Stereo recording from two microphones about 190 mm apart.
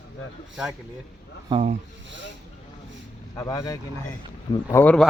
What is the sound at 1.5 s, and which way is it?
Speech, 35° right (ahead or behind).